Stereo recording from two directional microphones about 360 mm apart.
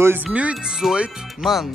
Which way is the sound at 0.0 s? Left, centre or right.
Centre.